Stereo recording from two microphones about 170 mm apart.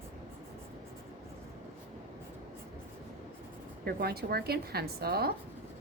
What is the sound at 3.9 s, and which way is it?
Speech, 65° right (ahead or behind).